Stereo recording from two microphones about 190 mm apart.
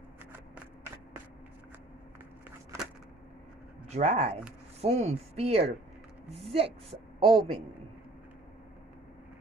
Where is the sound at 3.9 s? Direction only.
35° right (ahead or behind).